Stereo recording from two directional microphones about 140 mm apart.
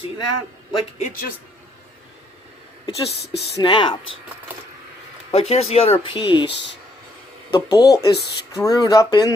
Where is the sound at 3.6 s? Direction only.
35° left (ahead or behind).